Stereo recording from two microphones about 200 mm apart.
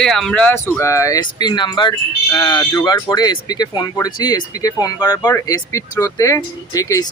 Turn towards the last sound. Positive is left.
turn(degrees=15)  # may be behind; listen again after turning